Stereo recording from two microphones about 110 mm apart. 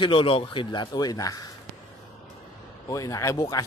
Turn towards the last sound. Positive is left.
turn(degrees=30)  # may be behind; listen again after turning